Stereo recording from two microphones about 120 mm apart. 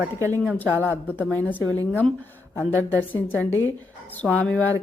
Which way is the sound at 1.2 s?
15° left (ahead or behind).